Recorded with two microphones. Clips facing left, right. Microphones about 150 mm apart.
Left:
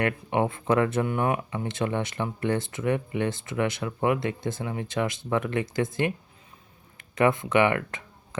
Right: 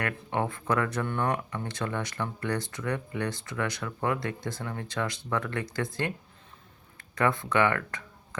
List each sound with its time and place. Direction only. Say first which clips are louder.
0.0 s speech: left 5 dB; 20° left (ahead or behind)
1.0 s speech: left 3 dB; 10° left (ahead or behind)
1.6 s speech: left 5 dB; 20° left (ahead or behind)